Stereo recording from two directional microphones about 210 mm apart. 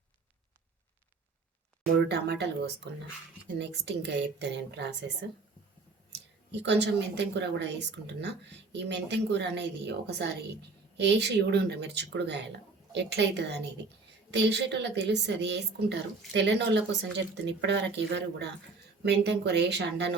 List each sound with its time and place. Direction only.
2.0 s speech: 50° right (ahead or behind)
3.6 s a woman's voice: 55° right (ahead or behind)
6.5 s a woman's voice: 55° right (ahead or behind)